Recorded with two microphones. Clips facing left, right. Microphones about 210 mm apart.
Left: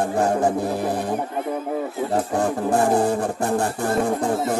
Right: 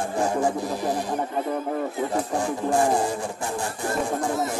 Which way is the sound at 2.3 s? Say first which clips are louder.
Left 2 dB; 60° left (ahead or behind).